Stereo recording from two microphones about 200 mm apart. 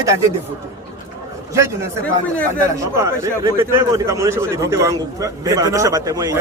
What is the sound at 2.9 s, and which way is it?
Speech, 15° right (ahead or behind).